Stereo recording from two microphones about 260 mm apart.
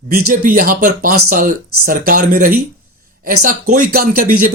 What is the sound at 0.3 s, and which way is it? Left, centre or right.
Speech, right.